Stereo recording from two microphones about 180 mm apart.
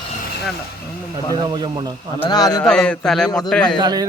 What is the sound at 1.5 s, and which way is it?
Speech, 25° right (ahead or behind).